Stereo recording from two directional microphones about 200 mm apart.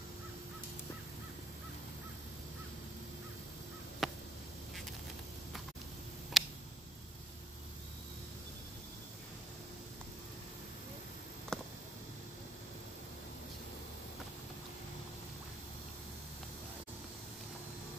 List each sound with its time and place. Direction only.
4.0 s crow: centre (ahead or behind)
6.4 s tick: centre (ahead or behind)
11.5 s a sound: 5° left (ahead or behind)